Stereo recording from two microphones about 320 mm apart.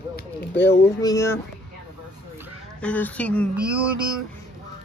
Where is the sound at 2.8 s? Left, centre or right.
Centre.